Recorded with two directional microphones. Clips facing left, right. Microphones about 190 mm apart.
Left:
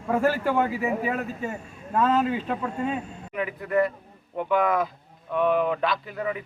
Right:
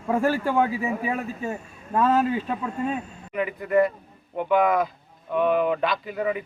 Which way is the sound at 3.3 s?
Centre (ahead or behind).